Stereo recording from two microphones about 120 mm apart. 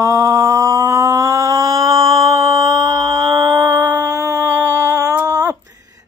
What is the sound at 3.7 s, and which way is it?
Humming, 20° right (ahead or behind).